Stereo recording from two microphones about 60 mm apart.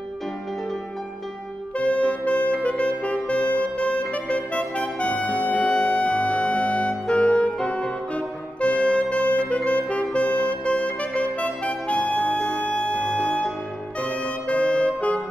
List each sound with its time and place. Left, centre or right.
1.8 s music: centre
14.0 s saxophone: centre